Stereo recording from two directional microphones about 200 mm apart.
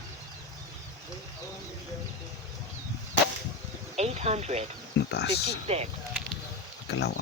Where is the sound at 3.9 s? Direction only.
30° right (ahead or behind).